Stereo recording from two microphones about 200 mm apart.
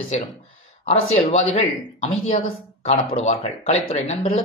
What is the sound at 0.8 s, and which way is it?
A woman's voice, 30° left (ahead or behind).